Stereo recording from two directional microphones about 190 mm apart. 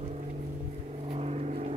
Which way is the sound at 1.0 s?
35° right (ahead or behind).